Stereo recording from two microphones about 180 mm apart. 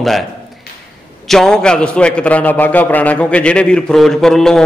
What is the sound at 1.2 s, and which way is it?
A man's voice, centre (ahead or behind).